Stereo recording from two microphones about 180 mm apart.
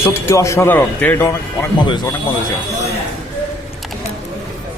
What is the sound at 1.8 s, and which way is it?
Speech, 25° left (ahead or behind).